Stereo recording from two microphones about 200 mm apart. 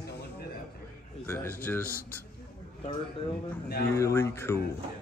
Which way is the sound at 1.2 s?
10° left (ahead or behind).